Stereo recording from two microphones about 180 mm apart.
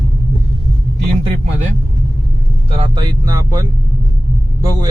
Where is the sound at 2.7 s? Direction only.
25° right (ahead or behind).